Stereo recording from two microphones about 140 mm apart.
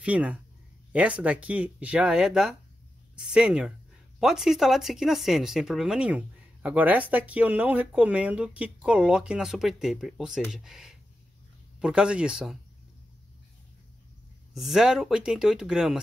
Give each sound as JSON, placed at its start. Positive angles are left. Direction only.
{"t": 0.0, "sound": "speech", "side_deg": -10}
{"t": 14.5, "sound": "speech", "side_deg": 0}